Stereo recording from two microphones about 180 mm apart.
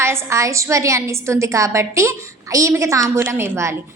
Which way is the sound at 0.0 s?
15° right (ahead or behind).